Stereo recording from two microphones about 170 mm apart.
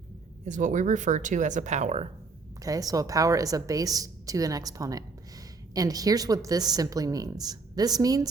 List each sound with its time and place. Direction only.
0.4 s speech: 45° right (ahead or behind)
2.6 s a woman's voice: 20° right (ahead or behind)